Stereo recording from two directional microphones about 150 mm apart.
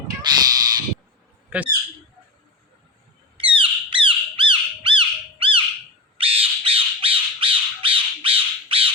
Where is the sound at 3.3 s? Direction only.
35° right (ahead or behind).